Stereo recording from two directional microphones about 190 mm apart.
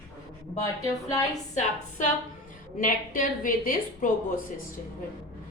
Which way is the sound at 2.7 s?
45° left (ahead or behind).